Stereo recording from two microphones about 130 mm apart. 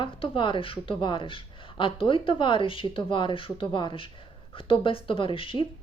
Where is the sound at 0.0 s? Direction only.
40° left (ahead or behind).